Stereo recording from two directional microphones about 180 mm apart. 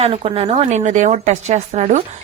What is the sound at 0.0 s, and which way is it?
Speech, 30° right (ahead or behind).